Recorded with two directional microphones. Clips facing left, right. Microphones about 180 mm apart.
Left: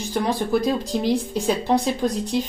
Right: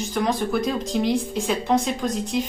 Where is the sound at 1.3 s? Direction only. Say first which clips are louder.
Left 1 dB; 35° left (ahead or behind).